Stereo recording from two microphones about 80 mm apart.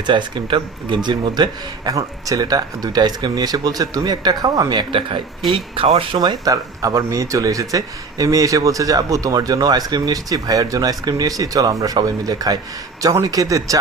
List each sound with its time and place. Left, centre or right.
0.0 s speech: right
1.0 s speech: right
1.9 s speech: right
5.9 s speech: right